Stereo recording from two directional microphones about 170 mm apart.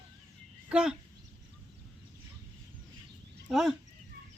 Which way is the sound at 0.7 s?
5° right (ahead or behind).